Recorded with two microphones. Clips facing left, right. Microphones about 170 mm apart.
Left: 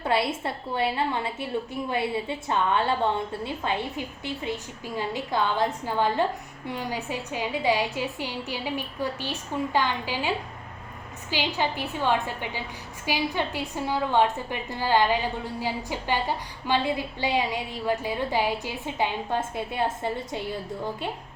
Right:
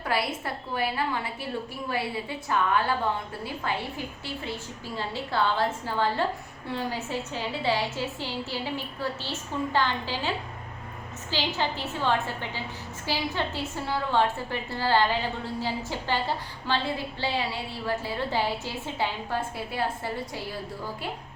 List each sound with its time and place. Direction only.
0.0 s a woman's voice: 25° left (ahead or behind)